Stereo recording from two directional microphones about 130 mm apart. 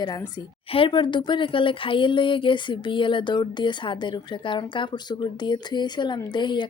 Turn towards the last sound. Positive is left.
turn(degrees=35)  # may be behind; listen again after turning